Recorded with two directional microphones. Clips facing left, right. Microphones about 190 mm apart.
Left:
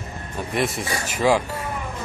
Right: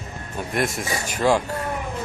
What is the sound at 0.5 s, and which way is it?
Speech, centre (ahead or behind).